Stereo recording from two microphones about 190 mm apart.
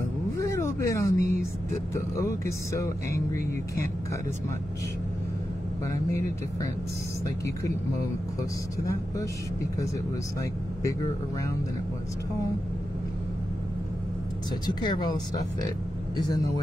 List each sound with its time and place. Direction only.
0.4 s vehicle: 15° left (ahead or behind)
2.1 s speech: 15° left (ahead or behind)
5.9 s speech: 15° left (ahead or behind)
8.7 s speech: 15° left (ahead or behind)
10.8 s speech: 15° left (ahead or behind)
14.7 s speech: 25° left (ahead or behind)